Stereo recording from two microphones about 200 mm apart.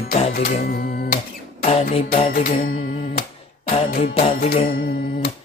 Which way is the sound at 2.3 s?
50° left (ahead or behind).